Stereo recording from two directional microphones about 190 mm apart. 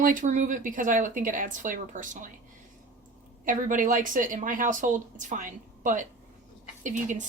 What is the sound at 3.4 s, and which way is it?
Speech, 45° right (ahead or behind).